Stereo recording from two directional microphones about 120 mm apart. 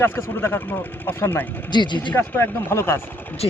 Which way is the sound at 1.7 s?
40° left (ahead or behind).